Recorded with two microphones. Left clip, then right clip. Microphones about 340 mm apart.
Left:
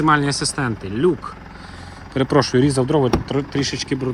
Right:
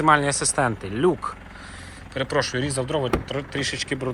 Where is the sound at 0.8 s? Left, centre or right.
Right.